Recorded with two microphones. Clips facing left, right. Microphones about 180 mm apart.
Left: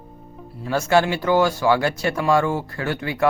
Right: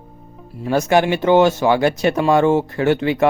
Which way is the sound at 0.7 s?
20° right (ahead or behind).